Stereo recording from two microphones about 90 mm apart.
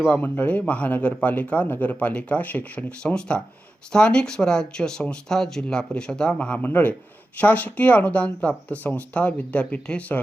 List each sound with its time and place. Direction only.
0.0 s speech: 20° left (ahead or behind)